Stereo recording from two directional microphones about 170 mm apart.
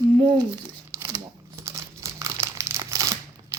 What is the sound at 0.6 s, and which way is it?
Crumpling, 20° right (ahead or behind).